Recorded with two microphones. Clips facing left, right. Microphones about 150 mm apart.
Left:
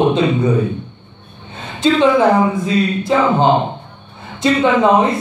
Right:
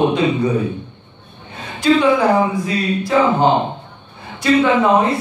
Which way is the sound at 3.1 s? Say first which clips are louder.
Even; 25° left (ahead or behind).